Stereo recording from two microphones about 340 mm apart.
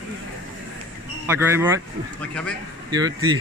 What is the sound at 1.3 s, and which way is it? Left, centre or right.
Speech, centre.